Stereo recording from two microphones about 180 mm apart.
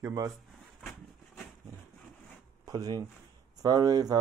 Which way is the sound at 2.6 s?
20° right (ahead or behind).